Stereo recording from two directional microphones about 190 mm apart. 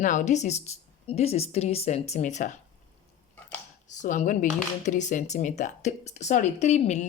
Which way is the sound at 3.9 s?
40° left (ahead or behind).